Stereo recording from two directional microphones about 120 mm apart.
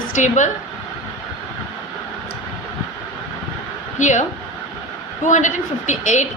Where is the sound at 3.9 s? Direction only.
90° left.